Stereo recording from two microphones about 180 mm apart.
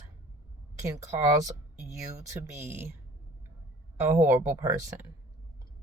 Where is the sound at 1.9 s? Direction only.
15° right (ahead or behind).